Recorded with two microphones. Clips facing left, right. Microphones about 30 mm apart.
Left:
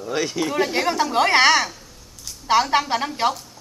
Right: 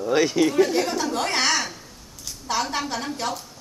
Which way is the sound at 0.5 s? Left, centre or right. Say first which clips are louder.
Even; left.